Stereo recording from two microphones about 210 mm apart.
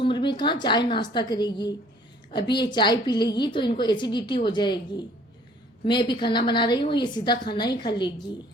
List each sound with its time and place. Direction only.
0.0 s a woman's voice: 20° left (ahead or behind)